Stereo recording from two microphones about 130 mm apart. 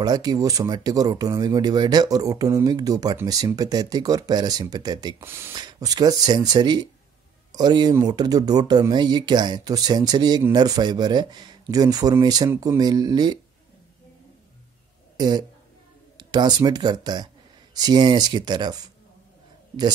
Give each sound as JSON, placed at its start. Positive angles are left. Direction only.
{"t": 0.0, "sound": "speech", "side_deg": -30}
{"t": 5.2, "sound": "speech", "side_deg": -20}
{"t": 5.5, "sound": "speech", "side_deg": -30}
{"t": 15.1, "sound": "speech", "side_deg": -30}